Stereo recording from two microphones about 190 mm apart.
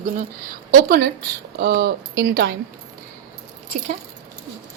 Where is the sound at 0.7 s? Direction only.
55° right (ahead or behind).